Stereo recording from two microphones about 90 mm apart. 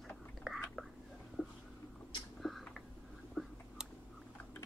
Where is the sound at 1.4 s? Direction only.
15° left (ahead or behind).